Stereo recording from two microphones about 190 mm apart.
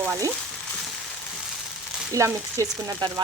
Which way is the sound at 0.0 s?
15° right (ahead or behind).